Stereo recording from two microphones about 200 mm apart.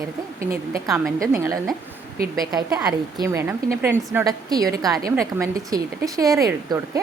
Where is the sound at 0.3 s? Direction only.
45° right (ahead or behind).